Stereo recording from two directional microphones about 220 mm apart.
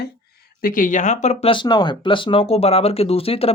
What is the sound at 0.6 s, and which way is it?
A woman's voice, 40° left (ahead or behind).